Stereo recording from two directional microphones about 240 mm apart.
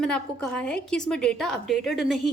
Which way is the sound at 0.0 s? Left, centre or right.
Centre.